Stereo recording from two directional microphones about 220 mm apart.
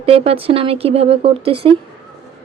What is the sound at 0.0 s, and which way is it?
Speech, 25° right (ahead or behind).